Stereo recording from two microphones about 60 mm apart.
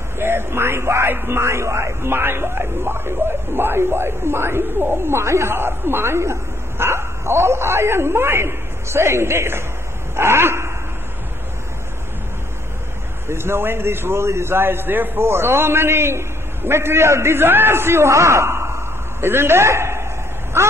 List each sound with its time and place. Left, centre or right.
0.2 s speech: right
13.3 s a man's voice: right